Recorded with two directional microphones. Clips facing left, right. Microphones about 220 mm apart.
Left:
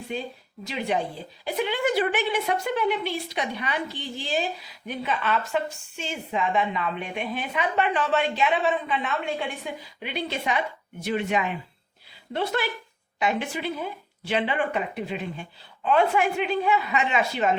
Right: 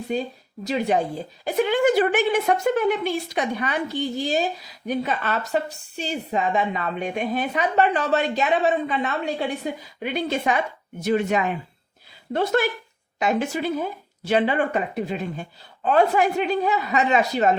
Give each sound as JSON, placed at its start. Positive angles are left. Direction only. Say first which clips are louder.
{"t": 0.6, "sound": "a woman's voice", "louder": "right 5 dB", "side_deg": -40}